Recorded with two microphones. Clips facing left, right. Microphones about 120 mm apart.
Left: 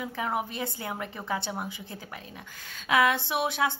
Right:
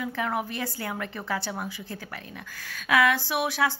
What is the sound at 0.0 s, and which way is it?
A woman's voice, 20° left (ahead or behind).